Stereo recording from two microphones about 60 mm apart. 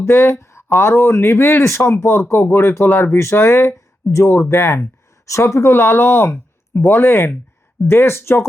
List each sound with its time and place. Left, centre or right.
0.0 s speech: left
5.2 s speech: left